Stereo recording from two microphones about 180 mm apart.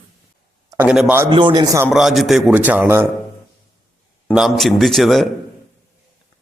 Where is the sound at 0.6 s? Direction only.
10° right (ahead or behind).